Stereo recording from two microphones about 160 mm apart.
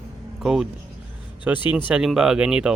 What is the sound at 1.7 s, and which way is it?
Speech, 10° right (ahead or behind).